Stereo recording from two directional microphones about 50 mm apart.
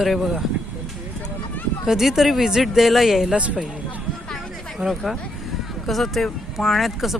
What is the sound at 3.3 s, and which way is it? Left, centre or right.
Speech, right.